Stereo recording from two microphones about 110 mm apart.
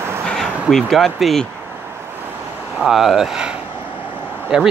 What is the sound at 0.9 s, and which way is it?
Speech, centre (ahead or behind).